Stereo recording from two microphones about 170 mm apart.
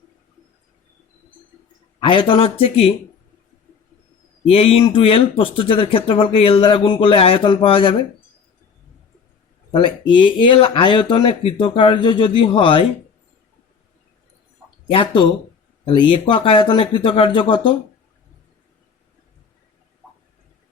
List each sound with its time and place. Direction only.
2.0 s speech: 30° left (ahead or behind)
4.5 s speech: 35° left (ahead or behind)
9.7 s speech: 30° left (ahead or behind)
14.8 s speech: 30° left (ahead or behind)